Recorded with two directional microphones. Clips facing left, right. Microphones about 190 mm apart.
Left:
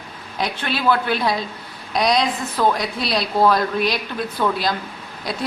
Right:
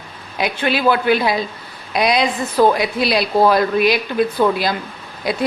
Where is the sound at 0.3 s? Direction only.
10° right (ahead or behind).